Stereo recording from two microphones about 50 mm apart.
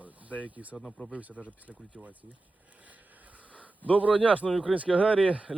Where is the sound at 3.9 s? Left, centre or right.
Left.